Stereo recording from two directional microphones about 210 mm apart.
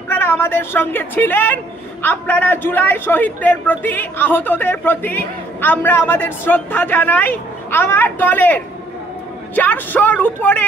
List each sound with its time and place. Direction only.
0.1 s speech: 10° left (ahead or behind)
9.6 s speech: 10° left (ahead or behind)